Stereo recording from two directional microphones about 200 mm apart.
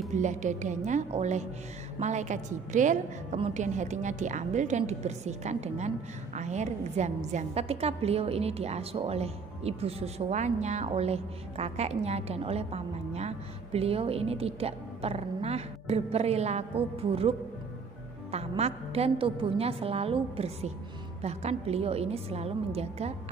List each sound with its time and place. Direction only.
0.1 s a woman's voice: 35° right (ahead or behind)
18.3 s a woman's voice: 30° right (ahead or behind)